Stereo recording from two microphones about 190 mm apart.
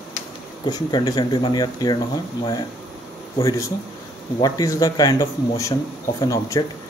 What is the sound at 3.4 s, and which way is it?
Speech, 15° left (ahead or behind).